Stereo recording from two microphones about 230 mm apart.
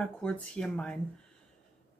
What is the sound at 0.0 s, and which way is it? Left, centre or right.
Speech, centre.